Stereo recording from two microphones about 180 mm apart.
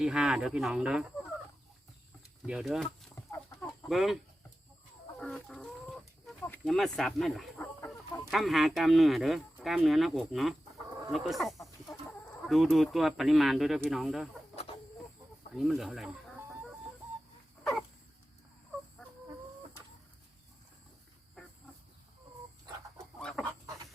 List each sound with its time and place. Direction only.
0.0 s speech: 5° right (ahead or behind)
2.5 s speech: 5° right (ahead or behind)
5.2 s chicken: 5° left (ahead or behind)
6.4 s speech: 5° left (ahead or behind)
15.5 s speech: centre (ahead or behind)
17.6 s dog: 5° left (ahead or behind)
21.4 s wild animals: 5° left (ahead or behind)
23.2 s chicken: 5° left (ahead or behind)